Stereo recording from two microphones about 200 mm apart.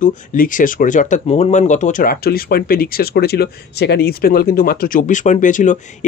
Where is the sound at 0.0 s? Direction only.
40° left (ahead or behind).